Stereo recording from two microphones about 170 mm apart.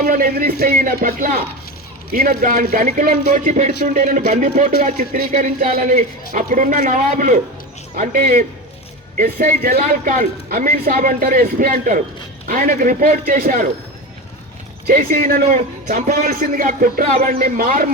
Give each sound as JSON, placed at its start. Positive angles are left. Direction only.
{"t": 0.0, "sound": "a man's voice", "side_deg": -55}
{"t": 14.8, "sound": "a man's voice", "side_deg": -60}